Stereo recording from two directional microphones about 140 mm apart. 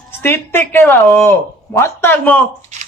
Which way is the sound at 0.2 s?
15° left (ahead or behind).